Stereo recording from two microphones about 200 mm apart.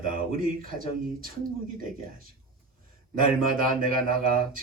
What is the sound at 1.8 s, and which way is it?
Speech, 45° right (ahead or behind).